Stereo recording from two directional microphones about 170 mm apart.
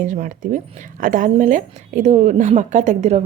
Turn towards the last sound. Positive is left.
turn(degrees=-45)  # may be behind; listen again after turning